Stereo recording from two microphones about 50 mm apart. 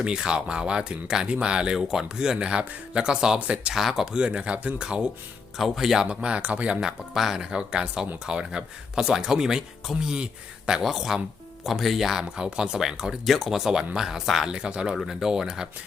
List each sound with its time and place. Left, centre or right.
0.0 s speech: centre
3.8 s speech: centre
5.5 s speech: centre
6.1 s speech: right
9.9 s speech: centre
10.7 s speech: centre
14.5 s speech: centre